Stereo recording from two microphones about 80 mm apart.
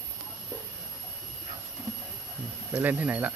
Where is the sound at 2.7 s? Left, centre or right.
Centre.